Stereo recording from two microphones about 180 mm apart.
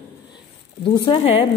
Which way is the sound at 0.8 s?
25° left (ahead or behind).